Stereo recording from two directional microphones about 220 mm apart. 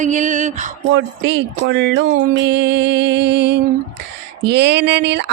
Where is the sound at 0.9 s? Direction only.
50° right (ahead or behind).